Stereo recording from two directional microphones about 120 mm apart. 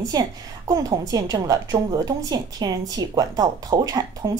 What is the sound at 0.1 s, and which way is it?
A woman's voice, 30° right (ahead or behind).